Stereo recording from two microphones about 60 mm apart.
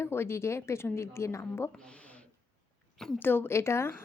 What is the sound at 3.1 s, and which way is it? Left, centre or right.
Speech, left.